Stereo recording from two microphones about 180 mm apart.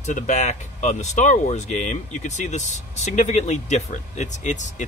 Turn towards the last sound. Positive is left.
turn(degrees=40)  # may be behind; listen again after turning